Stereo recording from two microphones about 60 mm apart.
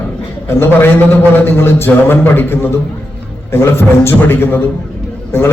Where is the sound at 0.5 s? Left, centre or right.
Left.